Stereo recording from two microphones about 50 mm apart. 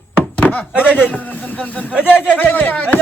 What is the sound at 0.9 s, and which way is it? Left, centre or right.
A man's voice, left.